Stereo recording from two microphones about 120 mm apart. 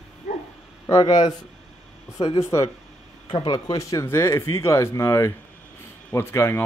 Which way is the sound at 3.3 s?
40° left (ahead or behind).